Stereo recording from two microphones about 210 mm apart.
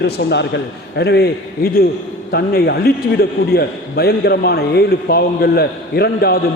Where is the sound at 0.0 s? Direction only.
50° left (ahead or behind).